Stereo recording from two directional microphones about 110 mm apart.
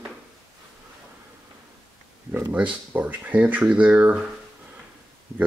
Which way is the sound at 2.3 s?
15° right (ahead or behind).